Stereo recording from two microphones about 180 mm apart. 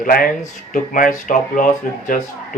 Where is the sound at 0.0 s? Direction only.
55° left (ahead or behind).